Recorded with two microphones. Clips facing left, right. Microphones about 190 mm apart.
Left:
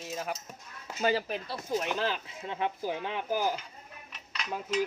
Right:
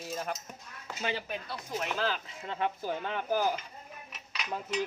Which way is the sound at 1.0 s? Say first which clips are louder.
Left 6 dB; 40° left (ahead or behind).